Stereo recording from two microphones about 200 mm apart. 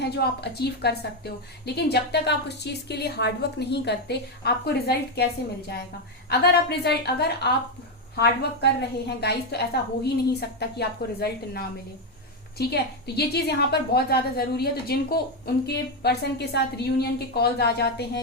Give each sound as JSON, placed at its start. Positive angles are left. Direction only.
{"t": 0.0, "sound": "a woman's voice", "side_deg": 55}